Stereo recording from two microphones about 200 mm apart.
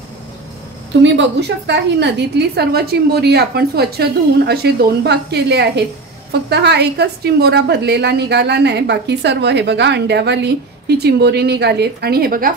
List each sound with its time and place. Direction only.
1.7 s a woman's voice: 60° right (ahead or behind)